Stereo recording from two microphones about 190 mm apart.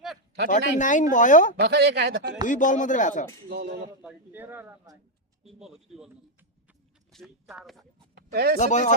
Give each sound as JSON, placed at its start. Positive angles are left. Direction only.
{"t": 0.5, "sound": "speech", "side_deg": 40}
{"t": 1.5, "sound": "speech", "side_deg": -60}
{"t": 2.5, "sound": "speech", "side_deg": 40}
{"t": 3.5, "sound": "speech", "side_deg": -60}
{"t": 4.0, "sound": "speech", "side_deg": -10}
{"t": 7.1, "sound": "speech", "side_deg": 0}
{"t": 8.1, "sound": "a sound", "side_deg": -55}
{"t": 8.5, "sound": "speech", "side_deg": 40}